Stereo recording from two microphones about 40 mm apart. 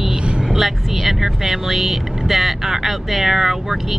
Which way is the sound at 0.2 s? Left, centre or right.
Right.